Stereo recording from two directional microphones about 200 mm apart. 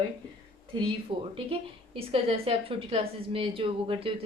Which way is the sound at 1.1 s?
25° right (ahead or behind).